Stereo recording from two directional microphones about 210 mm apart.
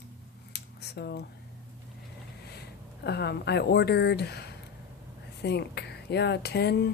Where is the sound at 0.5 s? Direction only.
50° left (ahead or behind).